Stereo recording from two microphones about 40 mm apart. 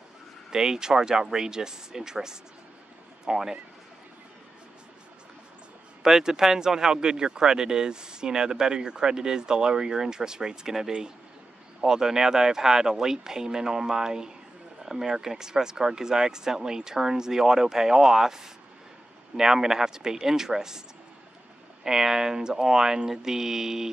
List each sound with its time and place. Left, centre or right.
0.5 s speech: centre
6.0 s speech: centre
21.8 s speech: centre